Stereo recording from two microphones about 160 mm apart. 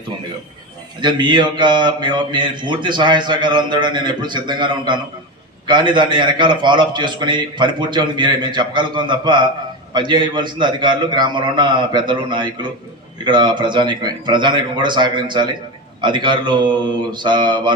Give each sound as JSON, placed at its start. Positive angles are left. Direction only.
{"t": 1.0, "sound": "speech", "side_deg": -30}